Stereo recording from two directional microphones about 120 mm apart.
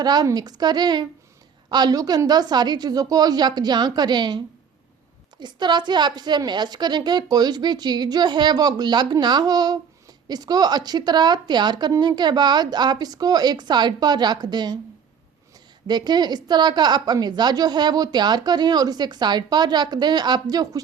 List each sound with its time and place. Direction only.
0.0 s a woman's voice: 35° right (ahead or behind)
5.4 s a woman's voice: 35° right (ahead or behind)
15.9 s a woman's voice: 35° right (ahead or behind)